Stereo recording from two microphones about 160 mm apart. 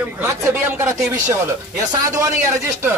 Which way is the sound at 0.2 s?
15° right (ahead or behind).